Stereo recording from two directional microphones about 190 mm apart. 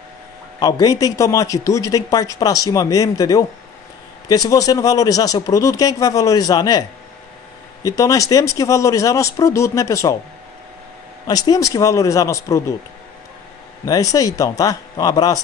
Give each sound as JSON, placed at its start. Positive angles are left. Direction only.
{"t": 0.6, "sound": "speech", "side_deg": 20}
{"t": 7.8, "sound": "speech", "side_deg": 20}
{"t": 11.2, "sound": "speech", "side_deg": 20}
{"t": 13.8, "sound": "speech", "side_deg": 20}